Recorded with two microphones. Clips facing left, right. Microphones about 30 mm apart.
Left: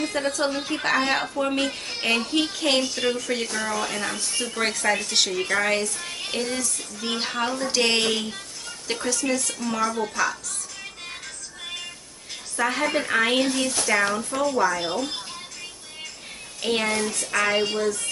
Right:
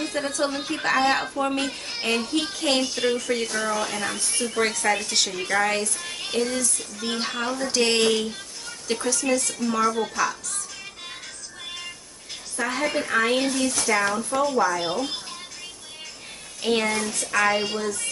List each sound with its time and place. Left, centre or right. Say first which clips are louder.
0.1 s speech: left 1 dB; centre
12.5 s a woman's voice: left 2 dB; centre
16.6 s speech: right 1 dB; centre